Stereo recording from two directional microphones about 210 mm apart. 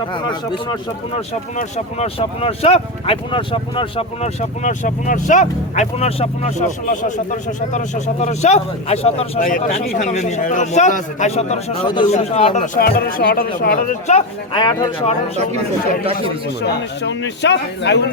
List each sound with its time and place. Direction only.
0.1 s speech: 20° left (ahead or behind)
1.3 s speech: 30° left (ahead or behind)
14.6 s speech: 20° left (ahead or behind)
16.6 s a man's voice: 55° left (ahead or behind)